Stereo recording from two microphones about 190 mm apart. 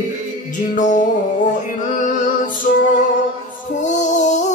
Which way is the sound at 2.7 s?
45° left (ahead or behind).